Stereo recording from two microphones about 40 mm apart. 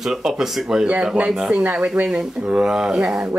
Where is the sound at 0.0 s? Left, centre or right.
Centre.